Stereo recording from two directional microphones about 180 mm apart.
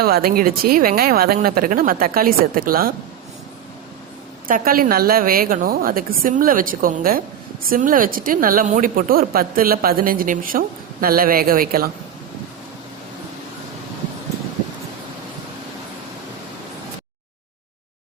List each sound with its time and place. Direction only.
0.0 s speech: 55° right (ahead or behind)
4.4 s speech: 50° right (ahead or behind)